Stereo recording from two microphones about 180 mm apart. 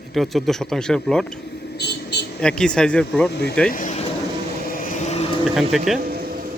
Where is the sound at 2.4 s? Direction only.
5° left (ahead or behind).